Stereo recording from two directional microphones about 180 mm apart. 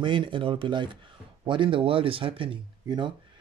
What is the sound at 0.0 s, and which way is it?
Speech, 25° right (ahead or behind).